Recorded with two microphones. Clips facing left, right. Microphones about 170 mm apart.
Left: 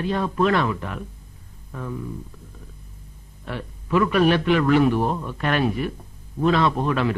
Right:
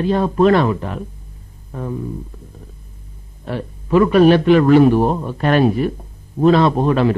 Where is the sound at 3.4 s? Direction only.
35° right (ahead or behind).